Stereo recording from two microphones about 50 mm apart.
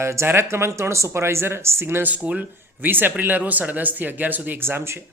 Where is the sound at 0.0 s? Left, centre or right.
Right.